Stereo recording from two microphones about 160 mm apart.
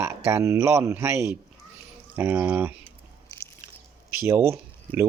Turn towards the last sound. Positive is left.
turn(degrees=-15)  # may be behind; listen again after turning